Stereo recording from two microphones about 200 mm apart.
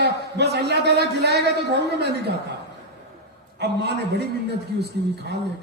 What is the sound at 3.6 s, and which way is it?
Speech, 55° right (ahead or behind).